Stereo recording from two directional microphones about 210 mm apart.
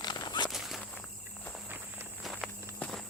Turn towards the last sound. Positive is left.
turn(degrees=0)  # may be behind; listen again after turning